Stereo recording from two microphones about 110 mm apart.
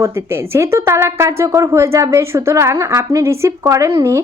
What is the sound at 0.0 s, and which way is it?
Speech, 25° right (ahead or behind).